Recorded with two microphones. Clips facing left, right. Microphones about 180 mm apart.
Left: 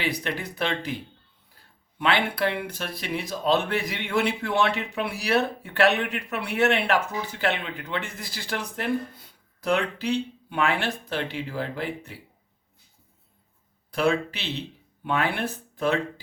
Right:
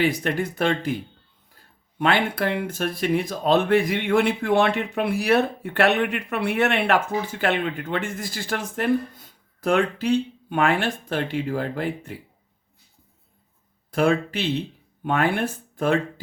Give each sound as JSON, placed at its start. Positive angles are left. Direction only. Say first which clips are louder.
{"t": 0.0, "sound": "speech", "louder": "right 7 dB", "side_deg": -50}
{"t": 2.0, "sound": "speech", "louder": "right 2 dB", "side_deg": -50}
{"t": 13.9, "sound": "speech", "louder": "right 3 dB", "side_deg": -50}